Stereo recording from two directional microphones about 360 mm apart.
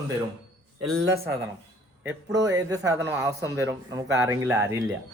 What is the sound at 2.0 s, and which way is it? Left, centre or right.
Speech, centre.